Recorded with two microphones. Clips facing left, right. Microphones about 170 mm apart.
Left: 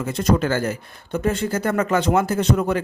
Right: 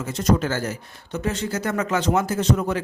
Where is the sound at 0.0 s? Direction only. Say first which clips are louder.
Left 2 dB; 60° left (ahead or behind).